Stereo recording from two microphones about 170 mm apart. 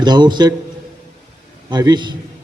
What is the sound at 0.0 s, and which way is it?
Speech, 25° right (ahead or behind).